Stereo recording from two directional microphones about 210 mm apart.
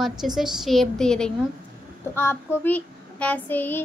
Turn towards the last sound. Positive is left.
turn(degrees=10)  # may be behind; listen again after turning